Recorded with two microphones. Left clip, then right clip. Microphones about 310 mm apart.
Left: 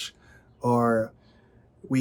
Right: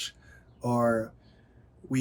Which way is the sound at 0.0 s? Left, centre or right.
Centre.